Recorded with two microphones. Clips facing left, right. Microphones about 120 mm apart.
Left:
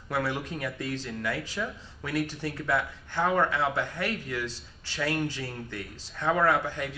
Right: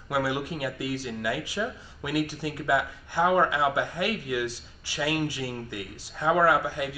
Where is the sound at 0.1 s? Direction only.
10° right (ahead or behind).